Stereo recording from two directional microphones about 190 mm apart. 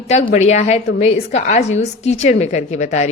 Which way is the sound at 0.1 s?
35° left (ahead or behind).